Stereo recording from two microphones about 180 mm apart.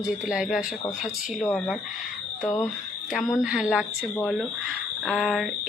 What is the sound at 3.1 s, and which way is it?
Speech, centre (ahead or behind).